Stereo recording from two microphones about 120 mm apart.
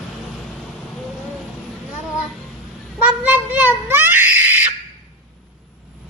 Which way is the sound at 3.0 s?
15° right (ahead or behind).